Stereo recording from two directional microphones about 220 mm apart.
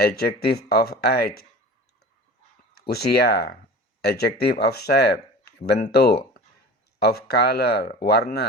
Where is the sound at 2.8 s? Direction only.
45° left (ahead or behind).